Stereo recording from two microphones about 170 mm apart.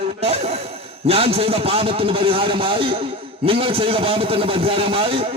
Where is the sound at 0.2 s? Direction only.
35° right (ahead or behind).